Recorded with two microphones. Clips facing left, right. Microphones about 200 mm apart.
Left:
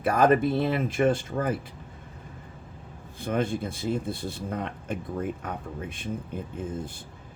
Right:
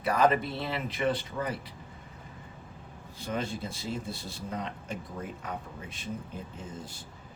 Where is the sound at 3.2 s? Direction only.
55° left (ahead or behind).